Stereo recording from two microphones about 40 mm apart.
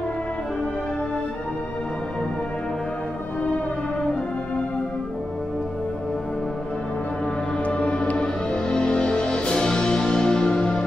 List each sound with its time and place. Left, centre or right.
7.7 s music: left
8.2 s music: centre